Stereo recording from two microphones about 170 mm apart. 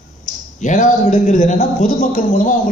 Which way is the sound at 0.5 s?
45° left (ahead or behind).